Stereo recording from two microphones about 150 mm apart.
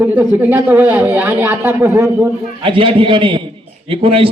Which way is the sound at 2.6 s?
35° right (ahead or behind).